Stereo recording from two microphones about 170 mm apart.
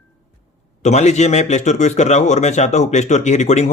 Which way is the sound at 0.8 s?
45° left (ahead or behind).